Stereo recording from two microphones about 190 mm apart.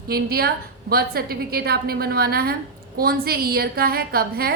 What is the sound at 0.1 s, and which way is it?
A woman's voice, 55° right (ahead or behind).